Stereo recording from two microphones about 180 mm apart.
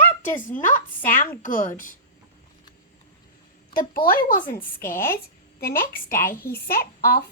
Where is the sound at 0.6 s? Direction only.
45° left (ahead or behind).